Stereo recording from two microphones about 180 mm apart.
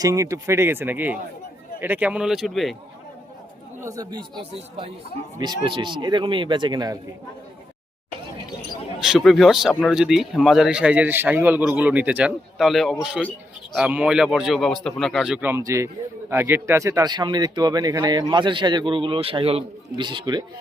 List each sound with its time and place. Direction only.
0.0 s speech: 15° right (ahead or behind); by 2.7 s centre (ahead or behind)
3.8 s speech: 20° right (ahead or behind)
9.0 s speech: centre (ahead or behind)
15.4 s speech: 15° right (ahead or behind)